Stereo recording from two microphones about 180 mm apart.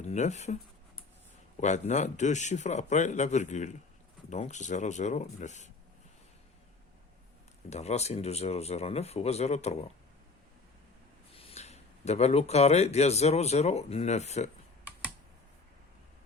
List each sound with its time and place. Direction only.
0.0 s speech: 40° left (ahead or behind)
1.6 s a man's voice: 40° left (ahead or behind)
7.7 s a man's voice: 35° left (ahead or behind)
11.3 s speech: 35° left (ahead or behind)